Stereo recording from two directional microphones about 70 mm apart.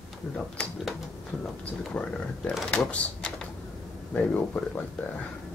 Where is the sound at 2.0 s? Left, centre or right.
Centre.